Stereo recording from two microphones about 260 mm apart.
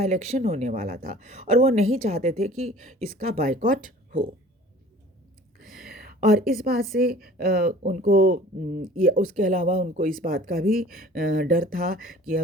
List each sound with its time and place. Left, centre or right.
0.0 s a woman's voice: right
5.5 s a sound: right
6.5 s speech: right